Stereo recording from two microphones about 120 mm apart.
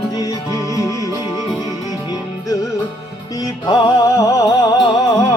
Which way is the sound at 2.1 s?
30° left (ahead or behind).